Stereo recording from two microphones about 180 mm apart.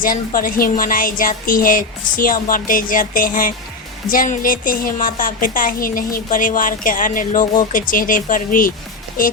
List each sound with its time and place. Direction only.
0.0 s speech: 50° left (ahead or behind)